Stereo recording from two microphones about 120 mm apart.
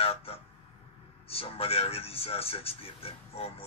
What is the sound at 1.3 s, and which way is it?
Speech, 55° left (ahead or behind).